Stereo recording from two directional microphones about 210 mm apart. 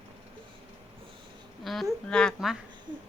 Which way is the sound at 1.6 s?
Centre (ahead or behind).